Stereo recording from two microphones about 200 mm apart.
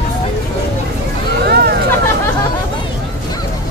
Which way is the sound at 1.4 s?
55° right (ahead or behind).